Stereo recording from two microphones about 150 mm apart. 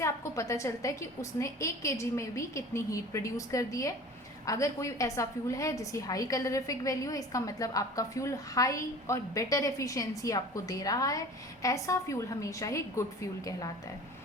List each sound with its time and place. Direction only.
0.0 s a woman's voice: 20° left (ahead or behind)